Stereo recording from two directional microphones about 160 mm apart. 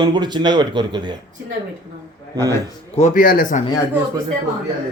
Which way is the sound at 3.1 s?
65° left (ahead or behind).